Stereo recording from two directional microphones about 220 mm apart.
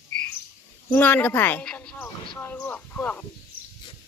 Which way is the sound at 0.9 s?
10° left (ahead or behind).